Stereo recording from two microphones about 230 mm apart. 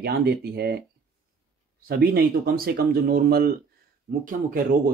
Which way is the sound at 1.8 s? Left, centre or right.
Right.